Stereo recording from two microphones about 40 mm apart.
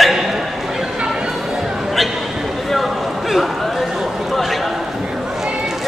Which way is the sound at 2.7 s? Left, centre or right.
Centre.